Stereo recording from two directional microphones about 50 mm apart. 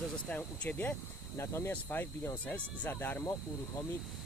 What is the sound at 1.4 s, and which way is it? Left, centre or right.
Speech, left.